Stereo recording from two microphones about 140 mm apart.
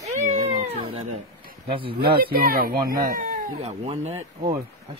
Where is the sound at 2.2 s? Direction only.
90° right.